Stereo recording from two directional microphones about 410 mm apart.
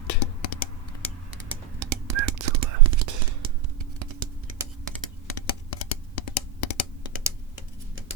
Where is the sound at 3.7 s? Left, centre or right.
Right.